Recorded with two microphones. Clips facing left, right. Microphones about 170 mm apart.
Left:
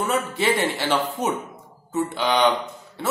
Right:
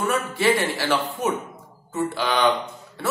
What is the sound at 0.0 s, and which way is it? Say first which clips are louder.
Speech: even; 20° left (ahead or behind).